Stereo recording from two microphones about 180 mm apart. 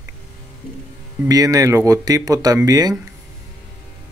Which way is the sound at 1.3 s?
20° right (ahead or behind).